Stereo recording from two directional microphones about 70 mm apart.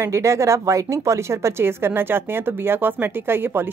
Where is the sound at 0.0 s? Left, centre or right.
Right.